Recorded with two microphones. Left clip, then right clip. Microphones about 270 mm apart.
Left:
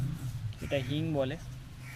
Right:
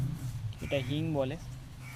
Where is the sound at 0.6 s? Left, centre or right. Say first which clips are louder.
Even; centre.